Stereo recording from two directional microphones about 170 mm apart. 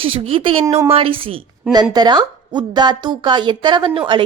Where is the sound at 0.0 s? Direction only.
30° right (ahead or behind).